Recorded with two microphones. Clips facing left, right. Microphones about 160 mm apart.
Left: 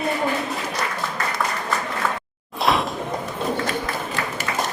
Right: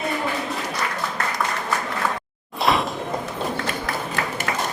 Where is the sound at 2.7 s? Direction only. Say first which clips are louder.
Even; centre (ahead or behind).